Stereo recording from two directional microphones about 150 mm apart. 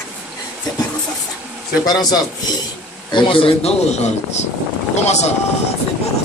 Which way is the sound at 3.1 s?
35° left (ahead or behind).